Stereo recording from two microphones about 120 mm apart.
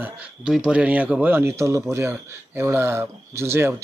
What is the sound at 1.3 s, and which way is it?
Speech, 20° right (ahead or behind).